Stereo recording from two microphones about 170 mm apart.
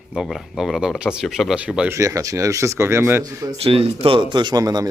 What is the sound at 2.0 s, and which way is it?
Speech, 20° right (ahead or behind).